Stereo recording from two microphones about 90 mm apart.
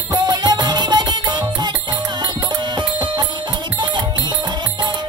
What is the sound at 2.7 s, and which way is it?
Music, 60° right (ahead or behind).